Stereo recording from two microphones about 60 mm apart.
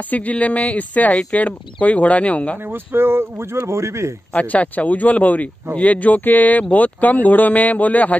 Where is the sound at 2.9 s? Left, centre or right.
Right.